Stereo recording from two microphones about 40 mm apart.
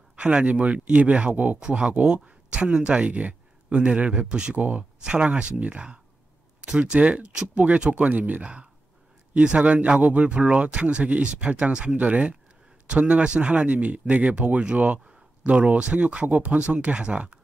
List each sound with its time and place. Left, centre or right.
0.1 s speech: right
1.6 s speech: right
4.6 s speech: right
5.0 s speech: right